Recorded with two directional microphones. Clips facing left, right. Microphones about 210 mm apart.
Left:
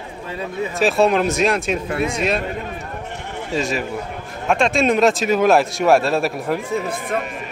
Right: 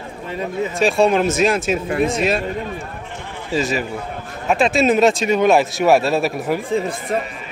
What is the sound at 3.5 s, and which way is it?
A man's voice, centre (ahead or behind).